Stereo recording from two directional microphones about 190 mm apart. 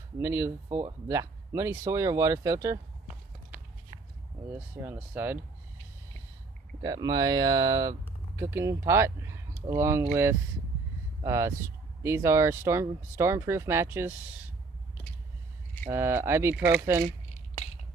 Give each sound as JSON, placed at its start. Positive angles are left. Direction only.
{"t": 0.2, "sound": "speech", "side_deg": -10}
{"t": 4.8, "sound": "speech", "side_deg": -10}
{"t": 6.8, "sound": "speech", "side_deg": -20}
{"t": 11.2, "sound": "speech", "side_deg": -15}
{"t": 15.9, "sound": "speech", "side_deg": -15}